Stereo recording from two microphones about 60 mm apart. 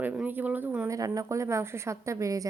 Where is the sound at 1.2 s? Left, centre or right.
Right.